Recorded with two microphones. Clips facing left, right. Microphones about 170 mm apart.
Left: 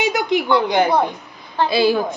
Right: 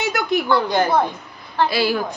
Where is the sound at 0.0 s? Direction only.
20° left (ahead or behind).